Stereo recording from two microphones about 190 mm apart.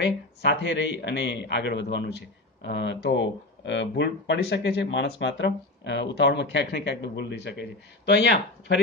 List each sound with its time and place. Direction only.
0.0 s a man's voice: 65° left (ahead or behind)